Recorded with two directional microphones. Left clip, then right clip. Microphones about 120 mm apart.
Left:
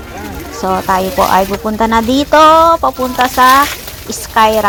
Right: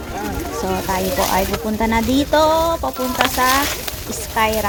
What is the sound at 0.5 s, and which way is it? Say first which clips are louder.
Speech: left 9 dB; 15° left (ahead or behind).